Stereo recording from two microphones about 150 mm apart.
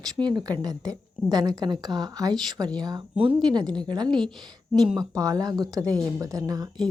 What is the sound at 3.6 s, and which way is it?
Speech, 5° left (ahead or behind).